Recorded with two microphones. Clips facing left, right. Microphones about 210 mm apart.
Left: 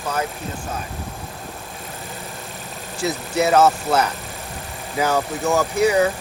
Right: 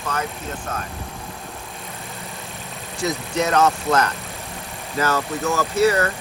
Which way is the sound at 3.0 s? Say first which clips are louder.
Left 1 dB; 5° left (ahead or behind).